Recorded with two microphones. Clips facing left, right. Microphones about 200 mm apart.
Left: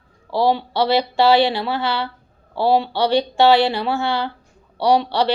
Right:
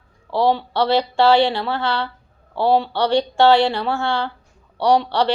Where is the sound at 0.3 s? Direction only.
10° left (ahead or behind).